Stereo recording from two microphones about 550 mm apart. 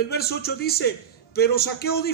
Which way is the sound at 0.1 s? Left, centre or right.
Centre.